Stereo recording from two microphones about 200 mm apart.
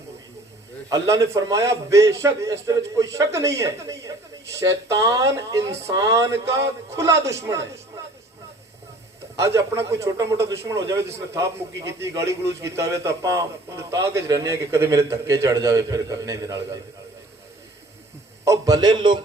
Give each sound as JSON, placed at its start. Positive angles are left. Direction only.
{"t": 0.9, "sound": "a man's voice", "side_deg": -15}
{"t": 9.3, "sound": "a man's voice", "side_deg": -15}
{"t": 18.4, "sound": "a man's voice", "side_deg": -15}